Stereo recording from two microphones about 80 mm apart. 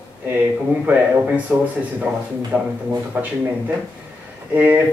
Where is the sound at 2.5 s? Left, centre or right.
Centre.